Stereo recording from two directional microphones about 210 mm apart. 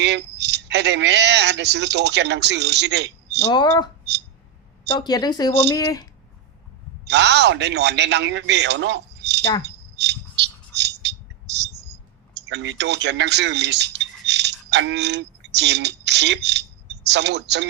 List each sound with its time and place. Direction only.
0.0 s speech: 55° right (ahead or behind)
3.5 s speech: 20° left (ahead or behind)
4.9 s speech: 20° left (ahead or behind)
7.0 s a man's voice: 55° right (ahead or behind)
9.6 s a sound: 55° right (ahead or behind)
12.5 s speech: 55° right (ahead or behind)